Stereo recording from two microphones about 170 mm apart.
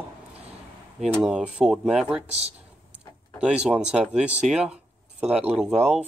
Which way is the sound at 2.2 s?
40° right (ahead or behind).